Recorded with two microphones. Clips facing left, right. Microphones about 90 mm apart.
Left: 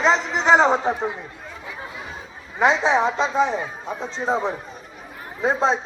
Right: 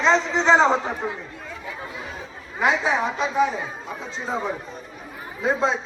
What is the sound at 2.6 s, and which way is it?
Speech, 25° left (ahead or behind).